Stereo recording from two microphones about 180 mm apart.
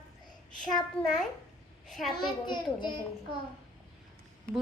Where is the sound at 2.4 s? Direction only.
25° left (ahead or behind).